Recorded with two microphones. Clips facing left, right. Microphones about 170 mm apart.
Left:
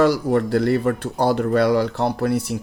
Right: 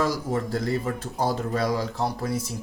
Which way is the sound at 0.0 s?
70° left (ahead or behind).